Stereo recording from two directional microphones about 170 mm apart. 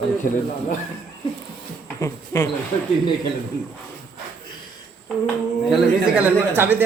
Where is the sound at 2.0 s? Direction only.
15° left (ahead or behind).